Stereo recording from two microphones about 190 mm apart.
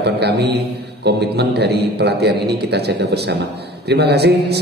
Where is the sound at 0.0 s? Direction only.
60° right (ahead or behind).